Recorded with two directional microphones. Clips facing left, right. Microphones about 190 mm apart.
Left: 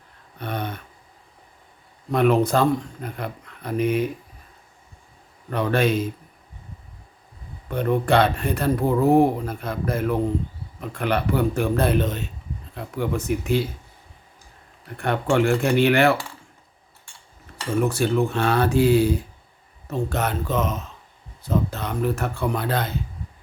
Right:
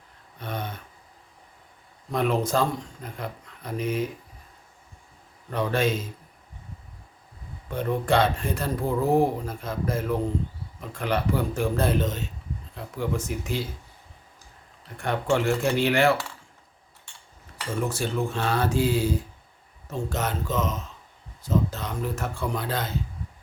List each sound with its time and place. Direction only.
0.3 s a sound: 65° left (ahead or behind)
2.1 s speech: 60° left (ahead or behind)
5.5 s speech: 65° left (ahead or behind)
7.7 s speech: 60° left (ahead or behind)
14.9 s speech: 60° left (ahead or behind)
17.8 s speech: 65° left (ahead or behind)